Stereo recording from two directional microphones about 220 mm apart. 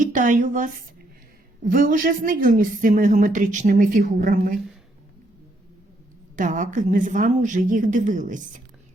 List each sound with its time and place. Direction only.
0.0 s a woman's voice: 35° right (ahead or behind)
6.3 s a woman's voice: 35° right (ahead or behind)